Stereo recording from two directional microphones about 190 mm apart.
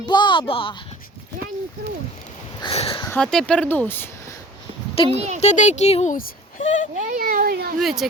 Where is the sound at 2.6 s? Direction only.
30° left (ahead or behind).